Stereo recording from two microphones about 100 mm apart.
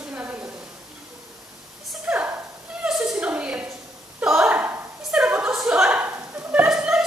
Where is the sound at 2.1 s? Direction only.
15° right (ahead or behind).